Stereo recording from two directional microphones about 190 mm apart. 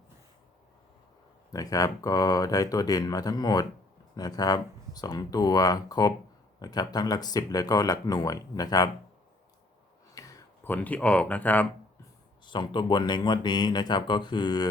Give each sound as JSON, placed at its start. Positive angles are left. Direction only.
{"t": 1.5, "sound": "speech", "side_deg": 20}
{"t": 10.2, "sound": "speech", "side_deg": 20}
{"t": 12.5, "sound": "speech", "side_deg": 25}